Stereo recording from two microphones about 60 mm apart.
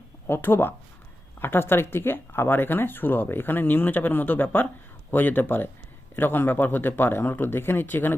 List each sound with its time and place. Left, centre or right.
0.3 s speech: left